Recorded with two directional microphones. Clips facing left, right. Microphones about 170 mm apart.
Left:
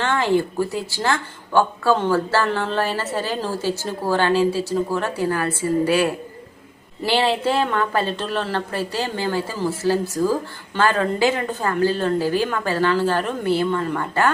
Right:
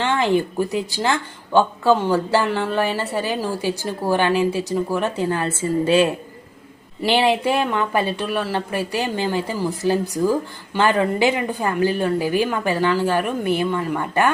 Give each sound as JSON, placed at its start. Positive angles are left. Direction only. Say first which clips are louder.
{"t": 0.0, "sound": "a woman's voice", "louder": "right 1 dB", "side_deg": -15}